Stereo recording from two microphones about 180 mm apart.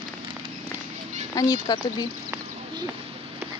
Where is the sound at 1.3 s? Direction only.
20° left (ahead or behind).